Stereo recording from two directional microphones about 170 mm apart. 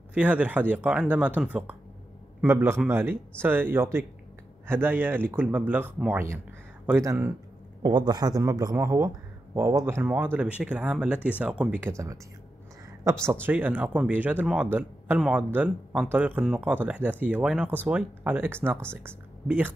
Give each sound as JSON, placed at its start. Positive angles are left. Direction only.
{"t": 0.1, "sound": "speech", "side_deg": -10}
{"t": 13.2, "sound": "speech", "side_deg": -15}